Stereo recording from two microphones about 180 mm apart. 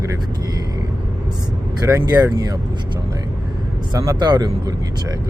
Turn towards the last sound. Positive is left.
turn(degrees=-20)  # may be behind; listen again after turning